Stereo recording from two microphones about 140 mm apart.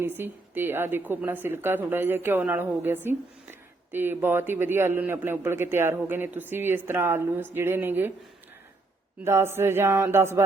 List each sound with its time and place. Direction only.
0.2 s a woman's voice: 15° right (ahead or behind)
9.2 s a woman's voice: 15° right (ahead or behind)